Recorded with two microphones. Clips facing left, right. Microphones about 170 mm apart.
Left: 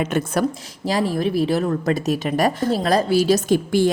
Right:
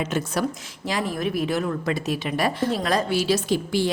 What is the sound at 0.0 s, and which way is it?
Speech, 55° left (ahead or behind).